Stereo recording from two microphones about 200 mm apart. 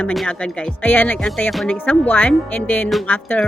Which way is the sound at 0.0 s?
5° left (ahead or behind).